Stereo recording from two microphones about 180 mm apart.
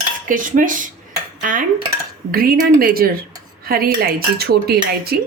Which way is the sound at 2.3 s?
55° right (ahead or behind).